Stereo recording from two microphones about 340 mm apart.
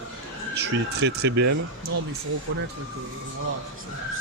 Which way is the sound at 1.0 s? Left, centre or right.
Right.